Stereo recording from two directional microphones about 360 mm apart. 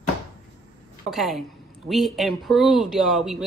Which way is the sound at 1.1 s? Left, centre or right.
Centre.